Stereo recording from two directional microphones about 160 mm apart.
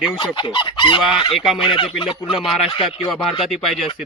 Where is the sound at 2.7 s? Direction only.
35° left (ahead or behind).